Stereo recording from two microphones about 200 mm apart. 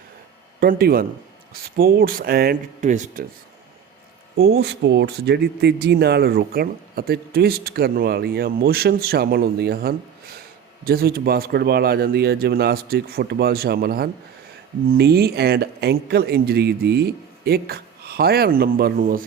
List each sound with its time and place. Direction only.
0.6 s a man's voice: 50° right (ahead or behind)
4.4 s a man's voice: 55° right (ahead or behind)